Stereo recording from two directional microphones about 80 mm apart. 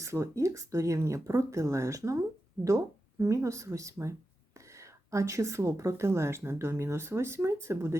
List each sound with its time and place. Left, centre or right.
0.0 s a woman's voice: right